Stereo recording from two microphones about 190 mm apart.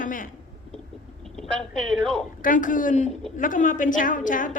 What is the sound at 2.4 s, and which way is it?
A woman's voice, 45° left (ahead or behind).